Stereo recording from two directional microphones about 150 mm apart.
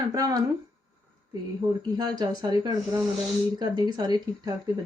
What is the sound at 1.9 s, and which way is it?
Speech, 25° right (ahead or behind).